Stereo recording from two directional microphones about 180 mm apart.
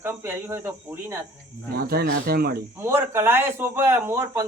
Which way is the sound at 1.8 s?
55° right (ahead or behind).